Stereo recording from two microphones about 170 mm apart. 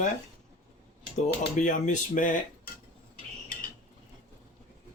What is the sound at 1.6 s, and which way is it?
Speech, 45° left (ahead or behind).